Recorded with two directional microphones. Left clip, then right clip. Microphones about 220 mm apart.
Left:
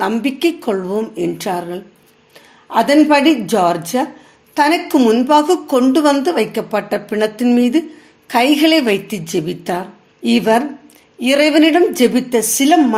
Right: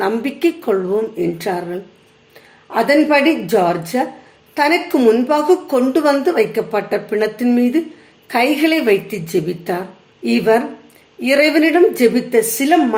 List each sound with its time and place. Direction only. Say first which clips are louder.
0.0 s a woman's voice: left 1 dB; 35° left (ahead or behind)